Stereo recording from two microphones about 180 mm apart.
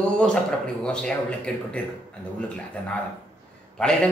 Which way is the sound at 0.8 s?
5° left (ahead or behind).